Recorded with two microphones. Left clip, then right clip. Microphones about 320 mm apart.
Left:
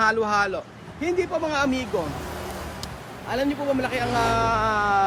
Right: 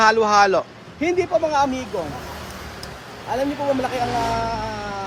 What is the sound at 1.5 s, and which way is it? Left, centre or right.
Speech, centre.